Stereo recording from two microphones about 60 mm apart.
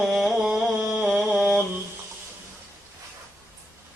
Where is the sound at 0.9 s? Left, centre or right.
Centre.